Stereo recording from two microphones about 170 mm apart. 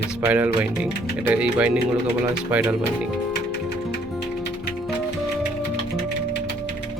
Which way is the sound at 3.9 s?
75° left (ahead or behind).